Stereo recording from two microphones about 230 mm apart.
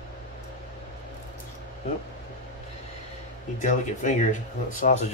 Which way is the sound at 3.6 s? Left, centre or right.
Left.